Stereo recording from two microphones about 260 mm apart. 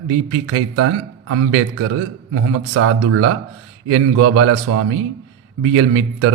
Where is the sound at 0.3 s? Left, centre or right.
Right.